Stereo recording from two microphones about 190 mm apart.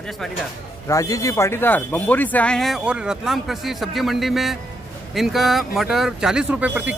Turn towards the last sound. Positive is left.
turn(degrees=-10)  # may be behind; listen again after turning